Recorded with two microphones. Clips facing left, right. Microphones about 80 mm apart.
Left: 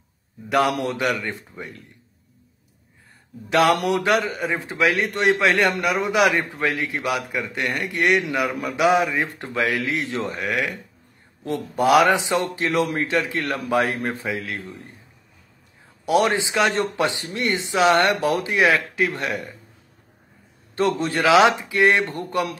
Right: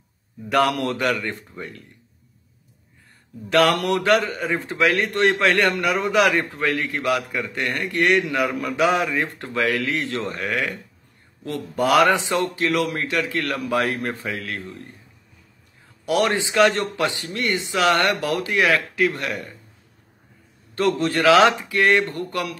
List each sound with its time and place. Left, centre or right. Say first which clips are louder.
0.5 s a man's voice: even; centre
3.4 s a man's voice: even; centre
11.4 s speech: left 2 dB; left
11.8 s a man's voice: left 1 dB; centre
12.2 s speech: even; left
14.2 s a man's voice: left 1 dB; centre
16.1 s speech: left 1 dB; left
20.7 s speech: right 1 dB; left